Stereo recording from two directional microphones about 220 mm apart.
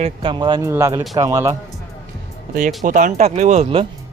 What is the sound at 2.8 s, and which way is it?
Speech, 35° right (ahead or behind).